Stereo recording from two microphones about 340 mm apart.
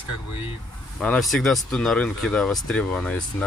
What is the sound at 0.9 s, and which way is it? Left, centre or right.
Speech, centre.